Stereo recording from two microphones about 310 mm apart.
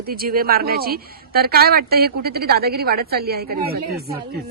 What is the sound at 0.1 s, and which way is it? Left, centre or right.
A woman's voice, right.